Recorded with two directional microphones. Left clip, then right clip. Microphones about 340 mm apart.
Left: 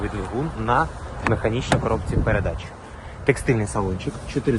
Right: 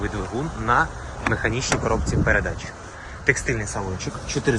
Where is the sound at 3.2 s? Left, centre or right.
Centre.